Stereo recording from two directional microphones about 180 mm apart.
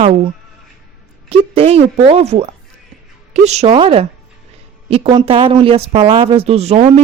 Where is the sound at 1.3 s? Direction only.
30° right (ahead or behind).